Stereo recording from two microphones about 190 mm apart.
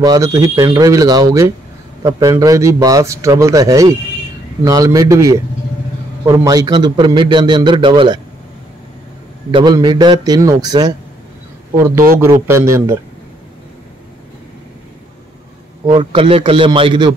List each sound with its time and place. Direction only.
0.0 s a man's voice: 20° right (ahead or behind)
9.5 s a man's voice: 25° right (ahead or behind)
12.4 s a man's voice: 15° right (ahead or behind)
15.9 s a man's voice: 25° right (ahead or behind)